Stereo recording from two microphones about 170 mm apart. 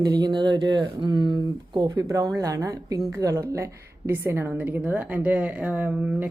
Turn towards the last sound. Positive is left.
turn(degrees=-10)  # may be behind; listen again after turning